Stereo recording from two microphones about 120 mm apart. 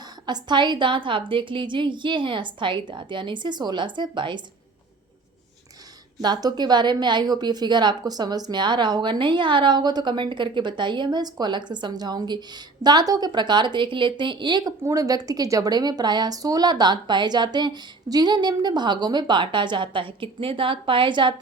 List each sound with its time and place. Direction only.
0.3 s a woman's voice: 40° right (ahead or behind)
6.2 s a woman's voice: 35° right (ahead or behind)